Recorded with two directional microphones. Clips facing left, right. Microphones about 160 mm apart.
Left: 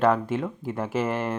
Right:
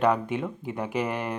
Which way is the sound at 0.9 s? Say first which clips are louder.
Left 3 dB; 45° left (ahead or behind).